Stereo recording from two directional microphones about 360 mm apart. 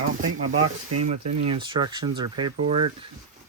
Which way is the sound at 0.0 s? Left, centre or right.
Right.